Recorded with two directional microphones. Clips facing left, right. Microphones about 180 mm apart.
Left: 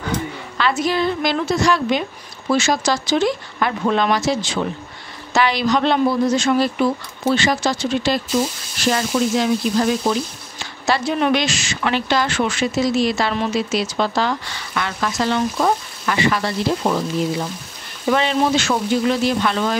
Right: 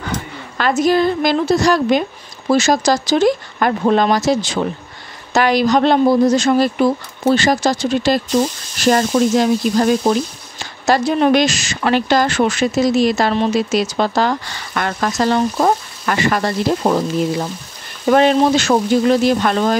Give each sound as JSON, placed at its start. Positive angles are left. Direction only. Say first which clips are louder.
{"t": 0.6, "sound": "a woman's voice", "louder": "right 5 dB", "side_deg": -45}
{"t": 18.1, "sound": "speech", "louder": "right 6 dB", "side_deg": -45}